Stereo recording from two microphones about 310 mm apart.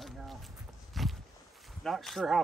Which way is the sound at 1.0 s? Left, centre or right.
Centre.